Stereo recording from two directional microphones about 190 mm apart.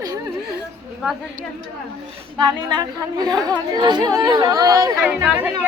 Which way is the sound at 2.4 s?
20° right (ahead or behind).